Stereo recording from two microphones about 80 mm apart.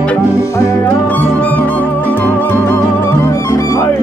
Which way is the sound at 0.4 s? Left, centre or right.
Left.